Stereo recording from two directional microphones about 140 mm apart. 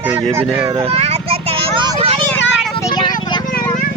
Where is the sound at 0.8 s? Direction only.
45° right (ahead or behind).